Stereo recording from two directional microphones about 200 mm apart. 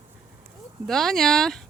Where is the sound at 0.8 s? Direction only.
Centre (ahead or behind).